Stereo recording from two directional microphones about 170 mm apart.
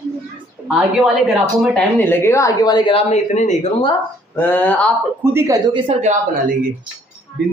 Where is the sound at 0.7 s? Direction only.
5° right (ahead or behind).